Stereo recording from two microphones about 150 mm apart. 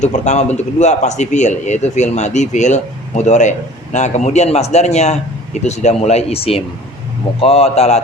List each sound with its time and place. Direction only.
0.0 s speech: 50° left (ahead or behind)